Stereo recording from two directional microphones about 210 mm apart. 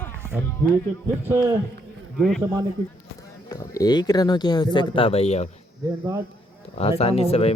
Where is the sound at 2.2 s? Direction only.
Centre (ahead or behind).